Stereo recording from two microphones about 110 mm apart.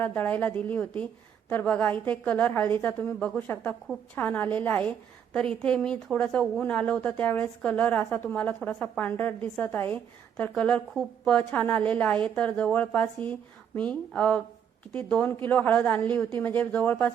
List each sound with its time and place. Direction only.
0.0 s a woman's voice: 15° left (ahead or behind)